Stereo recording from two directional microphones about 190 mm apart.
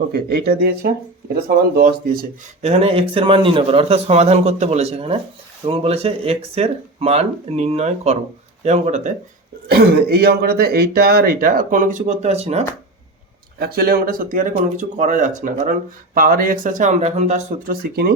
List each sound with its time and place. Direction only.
0.1 s speech: 55° right (ahead or behind)
2.6 s a man's voice: 35° right (ahead or behind)
9.6 s speech: 55° right (ahead or behind); by 12.6 s 35° right (ahead or behind)
13.6 s a man's voice: 55° right (ahead or behind); by 17.4 s 35° right (ahead or behind)
17.7 s speech: 55° right (ahead or behind)